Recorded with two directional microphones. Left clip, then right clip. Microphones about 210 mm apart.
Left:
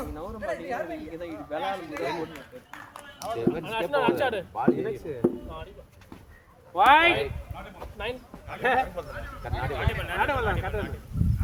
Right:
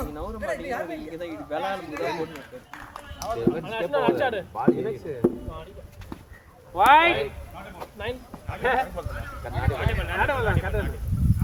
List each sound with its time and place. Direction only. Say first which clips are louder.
0.0 s speech: right 2 dB; 30° right (ahead or behind)
1.9 s speech: right 2 dB; 25° left (ahead or behind)
3.3 s speech: right 1 dB; 45° left (ahead or behind)
6.7 s speech: right 2 dB; 45° left (ahead or behind)